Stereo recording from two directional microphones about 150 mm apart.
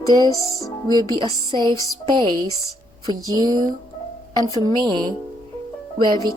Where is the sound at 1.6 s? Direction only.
25° left (ahead or behind).